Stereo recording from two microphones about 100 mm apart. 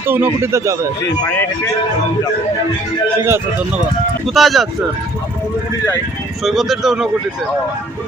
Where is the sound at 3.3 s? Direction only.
25° right (ahead or behind).